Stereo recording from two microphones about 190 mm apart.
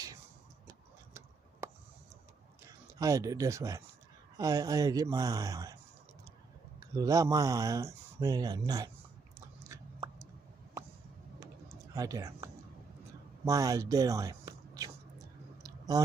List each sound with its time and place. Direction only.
0.7 s a sound: 15° right (ahead or behind)
2.6 s speech: 20° right (ahead or behind)
6.8 s speech: 15° right (ahead or behind)
9.6 s a sound: 15° right (ahead or behind)
11.9 s speech: 20° right (ahead or behind)
13.5 s speech: 15° right (ahead or behind)